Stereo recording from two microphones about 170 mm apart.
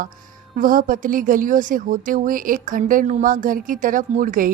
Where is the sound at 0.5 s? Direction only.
50° right (ahead or behind).